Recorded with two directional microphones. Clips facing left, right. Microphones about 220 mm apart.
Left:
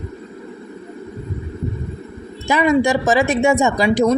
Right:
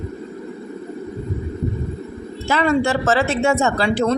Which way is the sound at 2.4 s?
15° left (ahead or behind).